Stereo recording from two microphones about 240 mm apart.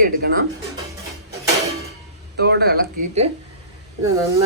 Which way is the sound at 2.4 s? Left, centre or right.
Right.